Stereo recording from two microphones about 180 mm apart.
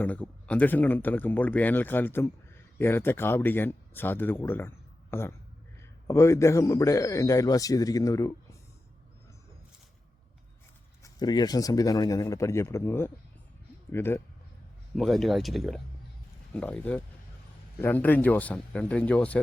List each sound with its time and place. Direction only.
0.0 s speech: 10° left (ahead or behind)
11.0 s speech: 20° left (ahead or behind)
14.9 s speech: centre (ahead or behind)